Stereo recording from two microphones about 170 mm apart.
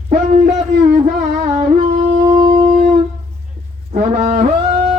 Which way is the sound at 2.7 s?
35° right (ahead or behind).